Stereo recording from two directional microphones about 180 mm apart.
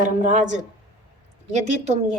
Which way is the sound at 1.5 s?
35° right (ahead or behind).